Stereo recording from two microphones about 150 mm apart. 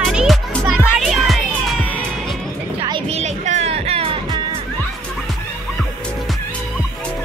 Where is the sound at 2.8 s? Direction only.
40° right (ahead or behind).